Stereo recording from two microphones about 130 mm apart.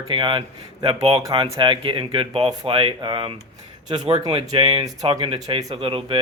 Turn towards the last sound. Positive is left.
turn(degrees=-45)  # may be behind; listen again after turning